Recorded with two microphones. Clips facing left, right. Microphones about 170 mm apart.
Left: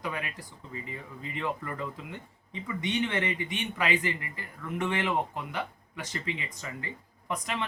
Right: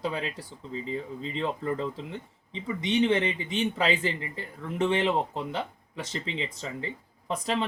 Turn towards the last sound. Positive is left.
turn(degrees=-30)  # may be behind; listen again after turning